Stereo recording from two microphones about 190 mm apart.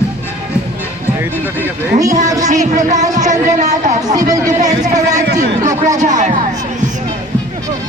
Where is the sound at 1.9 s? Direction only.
20° right (ahead or behind).